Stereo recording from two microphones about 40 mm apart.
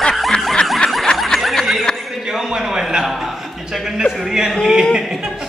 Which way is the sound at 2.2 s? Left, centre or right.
Centre.